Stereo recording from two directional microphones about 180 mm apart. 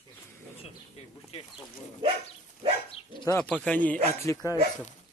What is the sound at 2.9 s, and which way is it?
Dog, 25° left (ahead or behind).